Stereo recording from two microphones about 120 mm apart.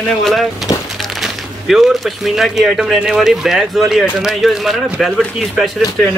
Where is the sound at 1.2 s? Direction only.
Centre (ahead or behind).